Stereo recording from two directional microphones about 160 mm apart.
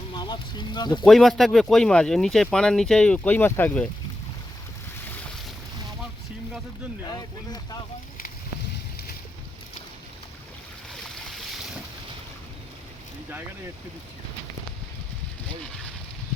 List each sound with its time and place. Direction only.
0.1 s speech: 25° left (ahead or behind)
1.0 s speech: centre (ahead or behind)
7.1 s speech: 25° left (ahead or behind)